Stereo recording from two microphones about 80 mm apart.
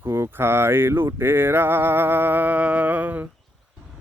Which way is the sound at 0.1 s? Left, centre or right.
Right.